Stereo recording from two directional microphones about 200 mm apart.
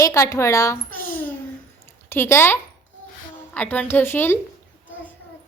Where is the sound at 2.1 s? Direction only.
10° left (ahead or behind).